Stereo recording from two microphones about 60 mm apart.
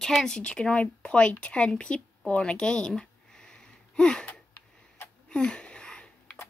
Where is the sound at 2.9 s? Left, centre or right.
Centre.